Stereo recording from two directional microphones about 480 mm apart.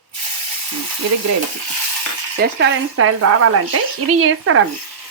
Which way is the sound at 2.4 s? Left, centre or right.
Right.